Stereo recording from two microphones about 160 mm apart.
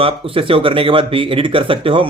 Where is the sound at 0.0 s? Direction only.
35° right (ahead or behind).